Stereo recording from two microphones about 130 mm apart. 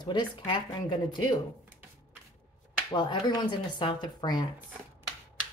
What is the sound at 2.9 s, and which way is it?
Speech, 35° left (ahead or behind).